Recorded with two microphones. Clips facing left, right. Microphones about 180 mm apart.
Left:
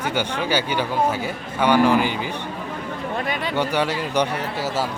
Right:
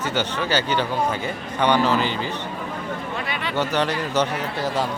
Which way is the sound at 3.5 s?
10° left (ahead or behind).